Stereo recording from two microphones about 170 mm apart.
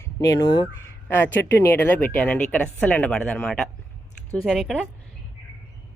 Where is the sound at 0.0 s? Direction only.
20° left (ahead or behind).